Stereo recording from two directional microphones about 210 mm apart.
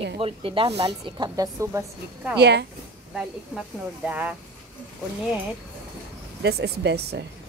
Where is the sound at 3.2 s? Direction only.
5° right (ahead or behind).